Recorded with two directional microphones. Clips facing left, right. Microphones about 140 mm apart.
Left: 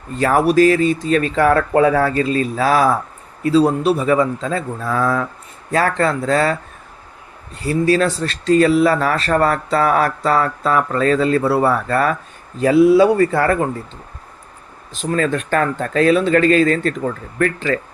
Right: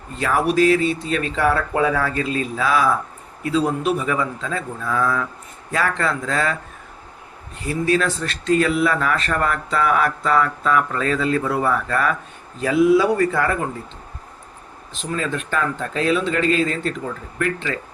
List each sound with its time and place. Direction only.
0.2 s speech: 45° left (ahead or behind)
2.1 s speech: 40° left (ahead or behind)
7.6 s speech: 35° left (ahead or behind)
15.1 s speech: 55° left (ahead or behind)